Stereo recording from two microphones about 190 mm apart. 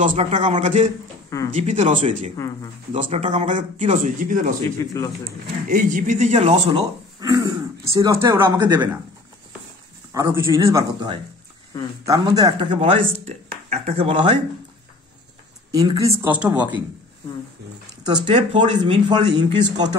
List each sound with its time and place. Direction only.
0.0 s speech: 40° right (ahead or behind)
4.7 s speech: 15° left (ahead or behind)
5.7 s speech: 45° right (ahead or behind)
6.8 s speech: 20° right (ahead or behind)
10.1 s speech: 20° right (ahead or behind)
12.1 s speech: 20° right (ahead or behind)
15.7 s speech: 20° right (ahead or behind)
16.2 s speech: 5° right (ahead or behind)
18.0 s speech: 25° right (ahead or behind)